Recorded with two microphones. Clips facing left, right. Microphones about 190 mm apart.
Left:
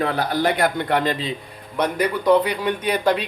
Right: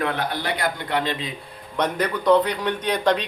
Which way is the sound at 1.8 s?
10° left (ahead or behind).